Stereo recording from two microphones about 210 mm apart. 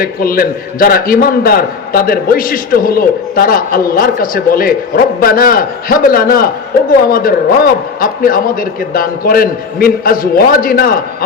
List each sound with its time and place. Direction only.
0.0 s a man's voice: 45° left (ahead or behind)